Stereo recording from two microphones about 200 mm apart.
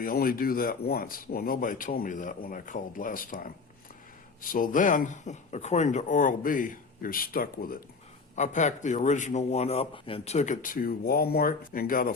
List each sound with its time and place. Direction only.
0.0 s a man's voice: 45° left (ahead or behind)